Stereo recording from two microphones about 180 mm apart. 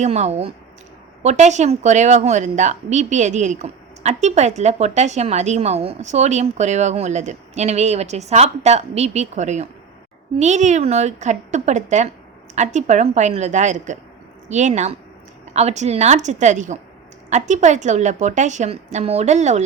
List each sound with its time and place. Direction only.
0.0 s speech: 40° right (ahead or behind)